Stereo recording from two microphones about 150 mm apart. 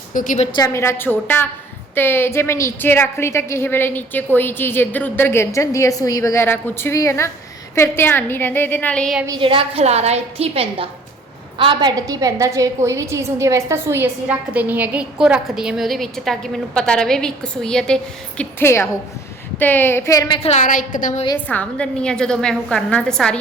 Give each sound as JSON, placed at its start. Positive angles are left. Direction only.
{"t": 0.1, "sound": "a woman's voice", "side_deg": 60}
{"t": 0.5, "sound": "a woman's voice", "side_deg": 20}
{"t": 9.2, "sound": "a woman's voice", "side_deg": -30}
{"t": 18.6, "sound": "a woman's voice", "side_deg": 15}
{"t": 20.6, "sound": "a woman's voice", "side_deg": 60}
{"t": 21.3, "sound": "a woman's voice", "side_deg": 10}